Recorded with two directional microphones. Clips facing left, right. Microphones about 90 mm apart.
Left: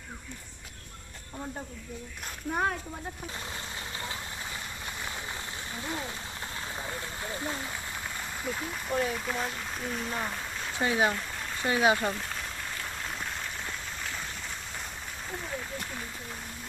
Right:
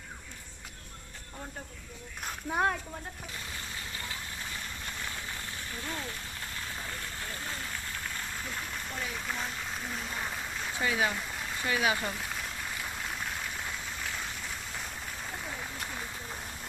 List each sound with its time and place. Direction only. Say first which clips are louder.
2.5 s speech: even; centre (ahead or behind)
5.7 s speech: left 3 dB; 20° left (ahead or behind)
8.4 s speech: left 5 dB; 5° left (ahead or behind)
10.8 s speech: left 4 dB; 25° left (ahead or behind)
12.1 s rain: left 1 dB; centre (ahead or behind)